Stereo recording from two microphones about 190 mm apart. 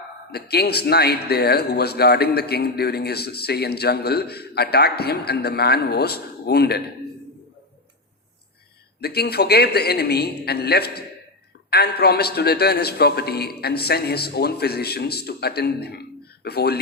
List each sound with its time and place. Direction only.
0.3 s a man's voice: 55° left (ahead or behind)
9.0 s a man's voice: 55° left (ahead or behind)